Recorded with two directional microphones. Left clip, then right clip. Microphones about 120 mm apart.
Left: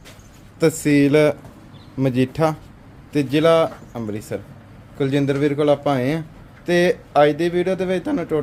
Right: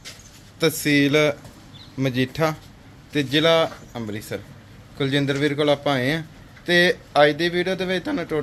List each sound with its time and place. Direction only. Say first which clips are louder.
0.6 s a man's voice: left 3 dB; 40° left (ahead or behind)